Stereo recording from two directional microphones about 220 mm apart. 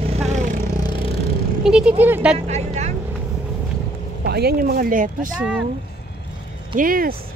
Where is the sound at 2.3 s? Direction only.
30° right (ahead or behind).